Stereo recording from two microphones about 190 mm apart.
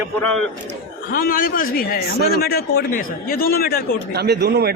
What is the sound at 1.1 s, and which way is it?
A man's voice, 50° left (ahead or behind).